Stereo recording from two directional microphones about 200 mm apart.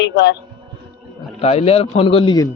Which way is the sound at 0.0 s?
60° left (ahead or behind).